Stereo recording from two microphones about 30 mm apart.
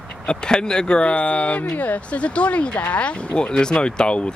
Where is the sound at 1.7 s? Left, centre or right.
Left.